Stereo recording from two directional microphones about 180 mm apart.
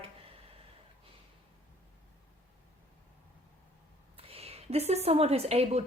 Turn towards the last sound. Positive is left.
turn(degrees=-35)  # may be behind; listen again after turning